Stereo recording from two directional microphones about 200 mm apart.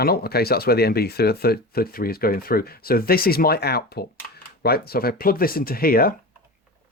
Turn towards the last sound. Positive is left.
turn(degrees=45)  # may be behind; listen again after turning